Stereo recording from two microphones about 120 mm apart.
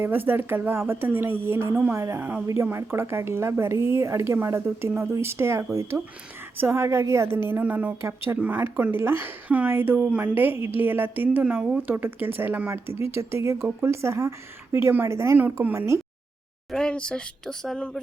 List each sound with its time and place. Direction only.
0.0 s a woman's voice: 15° right (ahead or behind)
16.7 s speech: 5° left (ahead or behind)